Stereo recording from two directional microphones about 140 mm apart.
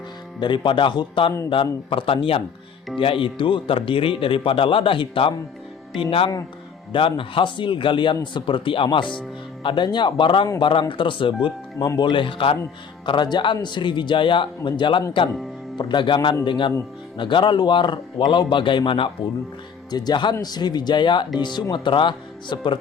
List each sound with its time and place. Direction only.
0.3 s speech: 35° left (ahead or behind)